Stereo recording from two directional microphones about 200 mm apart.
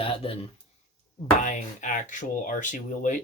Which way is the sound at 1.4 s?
40° left (ahead or behind).